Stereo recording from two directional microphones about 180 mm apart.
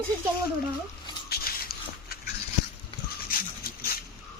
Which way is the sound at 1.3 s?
60° left (ahead or behind).